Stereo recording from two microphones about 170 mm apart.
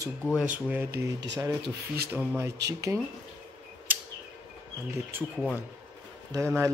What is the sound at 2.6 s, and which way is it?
Speech, 85° right.